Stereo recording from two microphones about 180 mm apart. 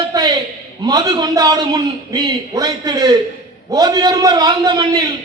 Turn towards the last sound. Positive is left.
turn(degrees=-20)  # may be behind; listen again after turning